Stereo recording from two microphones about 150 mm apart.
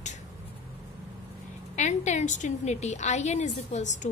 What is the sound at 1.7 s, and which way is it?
A woman's voice, 50° left (ahead or behind).